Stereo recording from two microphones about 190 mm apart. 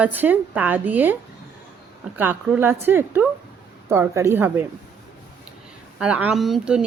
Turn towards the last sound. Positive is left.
turn(degrees=0)  # may be behind; listen again after turning